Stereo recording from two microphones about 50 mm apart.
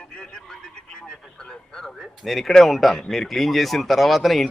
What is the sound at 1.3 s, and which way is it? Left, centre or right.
A man's voice, centre.